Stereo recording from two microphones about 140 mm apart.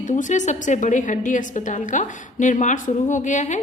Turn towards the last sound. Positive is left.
turn(degrees=60)  # may be behind; listen again after turning